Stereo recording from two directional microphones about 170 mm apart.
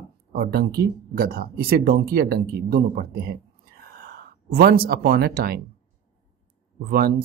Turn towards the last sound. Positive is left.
turn(degrees=-65)  # may be behind; listen again after turning